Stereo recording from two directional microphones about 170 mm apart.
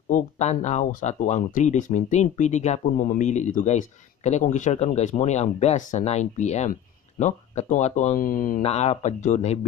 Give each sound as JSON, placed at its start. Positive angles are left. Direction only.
{"t": 0.1, "sound": "speech", "side_deg": 45}
{"t": 8.6, "sound": "speech", "side_deg": 40}